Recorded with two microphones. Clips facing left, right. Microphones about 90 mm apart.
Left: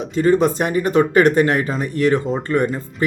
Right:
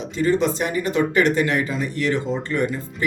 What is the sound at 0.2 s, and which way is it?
Speech, 45° left (ahead or behind).